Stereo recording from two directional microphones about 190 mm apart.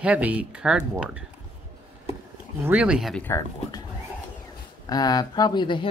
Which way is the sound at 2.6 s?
5° right (ahead or behind).